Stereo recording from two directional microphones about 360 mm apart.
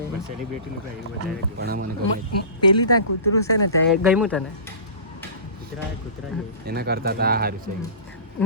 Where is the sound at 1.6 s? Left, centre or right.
Right.